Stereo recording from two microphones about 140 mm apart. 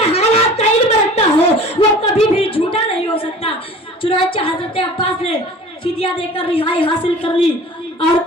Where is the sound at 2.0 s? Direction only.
45° left (ahead or behind).